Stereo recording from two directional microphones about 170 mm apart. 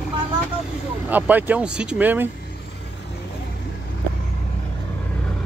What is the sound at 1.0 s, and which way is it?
Speech, 10° right (ahead or behind).